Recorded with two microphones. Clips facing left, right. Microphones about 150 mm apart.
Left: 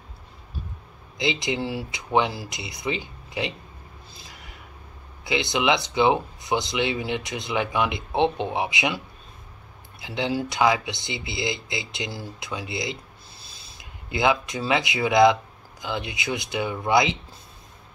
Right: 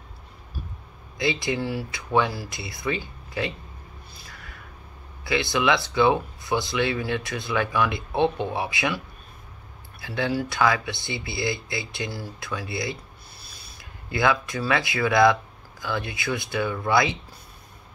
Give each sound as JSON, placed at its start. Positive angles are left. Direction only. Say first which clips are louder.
{"t": 1.1, "sound": "speech", "louder": "right 1 dB", "side_deg": 20}
{"t": 4.2, "sound": "a sound", "louder": "even", "side_deg": 20}
{"t": 5.2, "sound": "speech", "louder": "even", "side_deg": 20}